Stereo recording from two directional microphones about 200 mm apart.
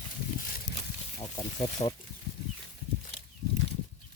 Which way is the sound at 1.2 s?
20° left (ahead or behind).